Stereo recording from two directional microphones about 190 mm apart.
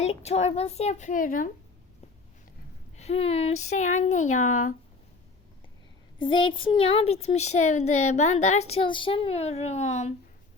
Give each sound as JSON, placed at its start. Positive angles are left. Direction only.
{"t": 0.0, "sound": "a woman's voice", "side_deg": 35}
{"t": 3.0, "sound": "a woman's voice", "side_deg": 30}
{"t": 6.1, "sound": "a woman's voice", "side_deg": 25}